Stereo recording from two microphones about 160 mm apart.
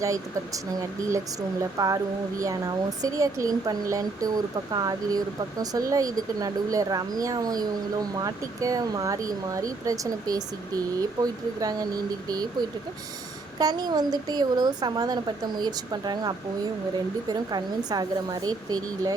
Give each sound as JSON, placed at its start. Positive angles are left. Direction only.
{"t": 0.0, "sound": "speech", "side_deg": -20}